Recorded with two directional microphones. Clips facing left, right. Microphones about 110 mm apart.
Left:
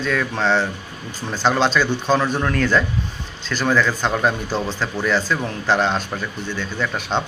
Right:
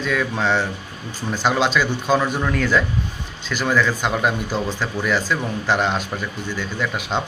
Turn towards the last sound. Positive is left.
turn(degrees=-5)  # may be behind; listen again after turning